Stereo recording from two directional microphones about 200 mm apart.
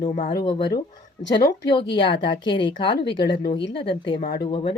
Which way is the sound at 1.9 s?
25° left (ahead or behind).